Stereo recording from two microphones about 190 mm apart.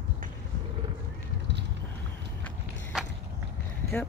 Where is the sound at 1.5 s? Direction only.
65° right (ahead or behind).